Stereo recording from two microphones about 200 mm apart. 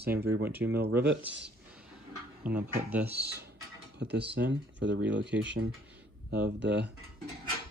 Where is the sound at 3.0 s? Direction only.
55° right (ahead or behind).